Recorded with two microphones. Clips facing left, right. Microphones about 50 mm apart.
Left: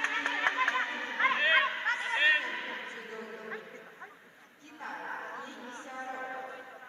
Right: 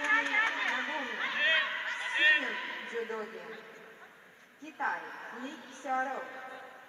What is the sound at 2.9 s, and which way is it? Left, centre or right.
Speech, right.